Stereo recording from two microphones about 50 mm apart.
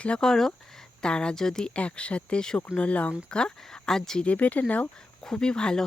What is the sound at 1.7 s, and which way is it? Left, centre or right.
Speech, left.